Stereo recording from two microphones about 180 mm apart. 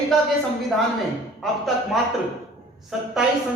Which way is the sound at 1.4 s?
Centre (ahead or behind).